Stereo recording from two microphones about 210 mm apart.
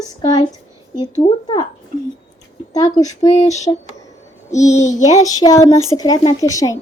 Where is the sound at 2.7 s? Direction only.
15° left (ahead or behind).